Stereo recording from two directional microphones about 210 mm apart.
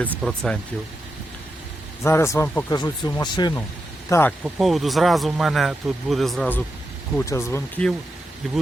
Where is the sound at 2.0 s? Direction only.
10° left (ahead or behind).